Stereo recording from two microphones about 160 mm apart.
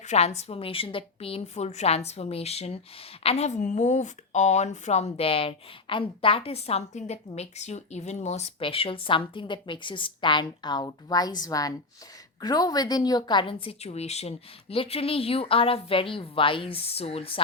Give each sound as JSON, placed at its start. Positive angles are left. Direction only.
{"t": 0.0, "sound": "a woman's voice", "side_deg": 45}